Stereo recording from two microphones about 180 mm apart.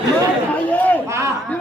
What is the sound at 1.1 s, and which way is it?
Speech, 15° right (ahead or behind).